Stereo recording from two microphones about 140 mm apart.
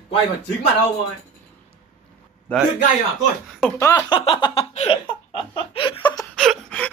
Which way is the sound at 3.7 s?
20° left (ahead or behind).